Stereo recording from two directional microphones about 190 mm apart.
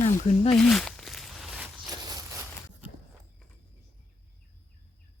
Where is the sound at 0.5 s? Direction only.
Centre (ahead or behind).